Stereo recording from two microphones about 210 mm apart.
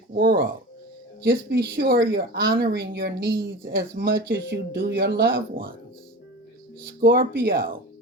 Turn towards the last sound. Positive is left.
turn(degrees=-45)  # may be behind; listen again after turning